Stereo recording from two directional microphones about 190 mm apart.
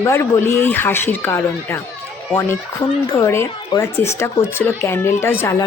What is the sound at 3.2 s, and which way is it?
Speech, 15° left (ahead or behind).